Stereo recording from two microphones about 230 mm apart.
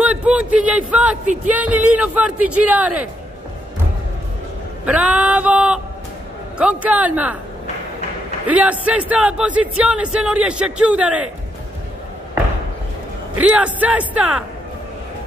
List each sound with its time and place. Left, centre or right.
0.0 s speech: centre
1.2 s music: right
1.5 s speech: centre
4.8 s a man's voice: centre
8.5 s speech: centre
13.4 s speech: centre